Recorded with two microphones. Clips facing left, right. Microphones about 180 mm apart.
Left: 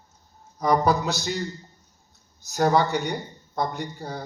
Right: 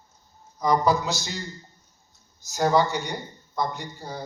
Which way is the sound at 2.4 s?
60° left (ahead or behind).